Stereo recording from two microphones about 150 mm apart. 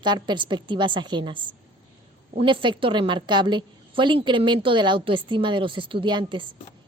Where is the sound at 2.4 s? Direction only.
35° right (ahead or behind).